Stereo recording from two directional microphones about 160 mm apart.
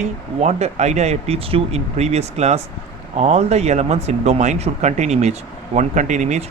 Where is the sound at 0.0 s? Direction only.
45° right (ahead or behind).